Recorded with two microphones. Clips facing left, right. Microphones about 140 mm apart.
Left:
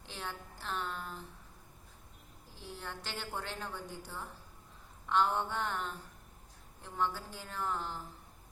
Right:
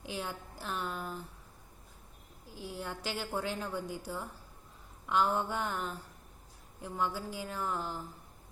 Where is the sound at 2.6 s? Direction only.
10° right (ahead or behind).